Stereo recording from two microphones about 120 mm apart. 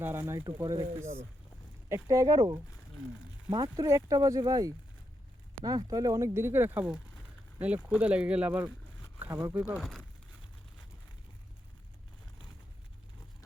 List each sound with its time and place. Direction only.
0.0 s speech: 20° right (ahead or behind)
0.4 s speech: 30° right (ahead or behind); by 9.7 s 15° right (ahead or behind)
9.7 s speech: centre (ahead or behind)